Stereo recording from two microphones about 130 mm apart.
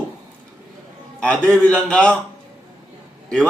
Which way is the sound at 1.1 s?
10° left (ahead or behind).